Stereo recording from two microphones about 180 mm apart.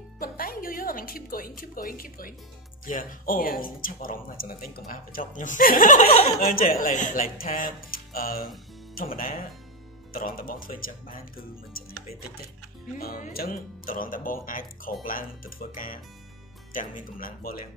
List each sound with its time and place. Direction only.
0.2 s speech: 55° left (ahead or behind); by 6.2 s 40° left (ahead or behind)
6.4 s speech: 55° left (ahead or behind)
12.9 s speech: 50° left (ahead or behind)